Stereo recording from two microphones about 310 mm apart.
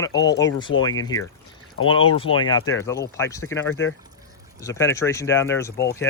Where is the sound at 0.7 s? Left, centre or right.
Left.